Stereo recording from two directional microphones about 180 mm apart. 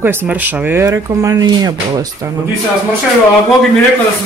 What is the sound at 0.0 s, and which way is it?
Speech, 10° right (ahead or behind).